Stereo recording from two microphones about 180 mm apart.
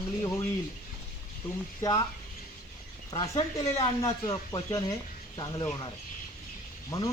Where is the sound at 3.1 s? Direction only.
20° left (ahead or behind).